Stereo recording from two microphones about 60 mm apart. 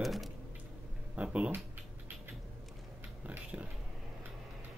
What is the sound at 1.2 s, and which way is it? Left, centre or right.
Speech, centre.